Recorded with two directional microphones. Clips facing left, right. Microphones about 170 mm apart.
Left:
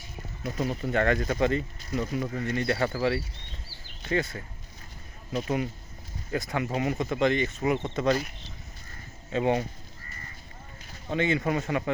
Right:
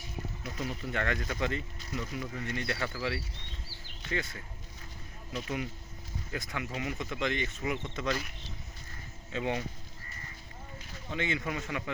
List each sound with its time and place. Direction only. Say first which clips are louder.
0.4 s speech: left 9 dB; 40° left (ahead or behind)
7.8 s speech: left 8 dB; 60° left (ahead or behind)
8.0 s speech: left 8 dB; 40° left (ahead or behind)
9.3 s speech: left 8 dB; 45° left (ahead or behind)
11.1 s speech: left 8 dB; 40° left (ahead or behind)